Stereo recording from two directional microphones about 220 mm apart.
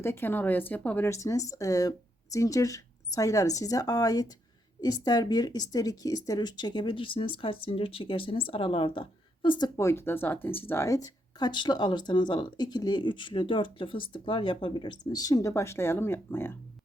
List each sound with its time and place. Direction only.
0.0 s a woman's voice: 10° left (ahead or behind)